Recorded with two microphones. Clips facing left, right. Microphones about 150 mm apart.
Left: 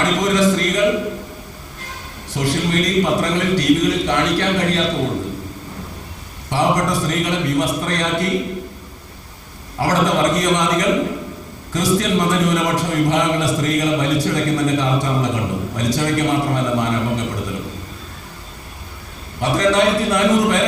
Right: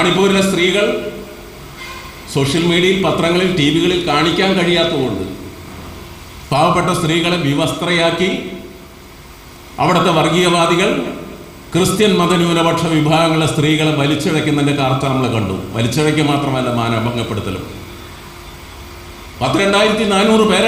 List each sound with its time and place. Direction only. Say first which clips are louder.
0.0 s a man's voice: right 4 dB; 90° right
2.3 s a man's voice: right 6 dB; 90° right
6.5 s a man's voice: right 4 dB; 90° right
9.7 s a man's voice: right 4 dB; 90° right
19.4 s a man's voice: right 3 dB; 90° right